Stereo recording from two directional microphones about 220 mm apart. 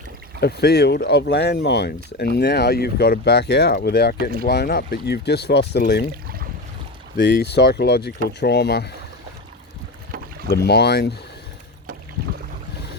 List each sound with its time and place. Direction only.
0.3 s speech: 45° left (ahead or behind)
7.2 s speech: 50° left (ahead or behind)
10.5 s speech: 45° left (ahead or behind)